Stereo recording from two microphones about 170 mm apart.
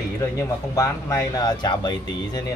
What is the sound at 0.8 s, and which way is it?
Speech, 15° left (ahead or behind).